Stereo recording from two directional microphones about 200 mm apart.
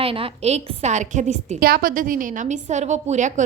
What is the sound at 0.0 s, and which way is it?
A woman's voice, 30° right (ahead or behind).